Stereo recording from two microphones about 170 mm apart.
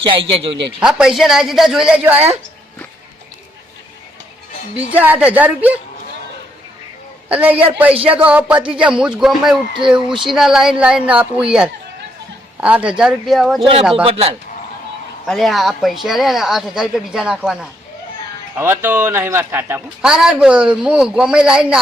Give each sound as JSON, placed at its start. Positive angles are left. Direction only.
{"t": 0.0, "sound": "a woman's voice", "side_deg": -30}
{"t": 0.8, "sound": "speech", "side_deg": -5}
{"t": 4.9, "sound": "a man's voice", "side_deg": -10}
{"t": 7.3, "sound": "a man's voice", "side_deg": -10}
{"t": 13.9, "sound": "a woman's voice", "side_deg": -35}
{"t": 15.3, "sound": "speech", "side_deg": 0}
{"t": 18.5, "sound": "a man's voice", "side_deg": -15}